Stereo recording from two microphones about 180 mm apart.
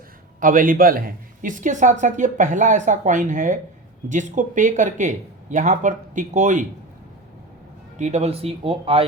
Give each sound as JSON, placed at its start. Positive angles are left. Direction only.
{"t": 0.3, "sound": "a woman's voice", "side_deg": -50}
{"t": 7.9, "sound": "speech", "side_deg": -40}